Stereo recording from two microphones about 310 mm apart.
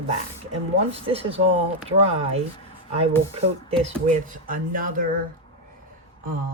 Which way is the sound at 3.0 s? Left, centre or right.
Centre.